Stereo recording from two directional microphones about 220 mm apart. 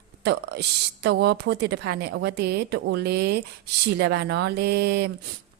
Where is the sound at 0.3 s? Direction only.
50° right (ahead or behind).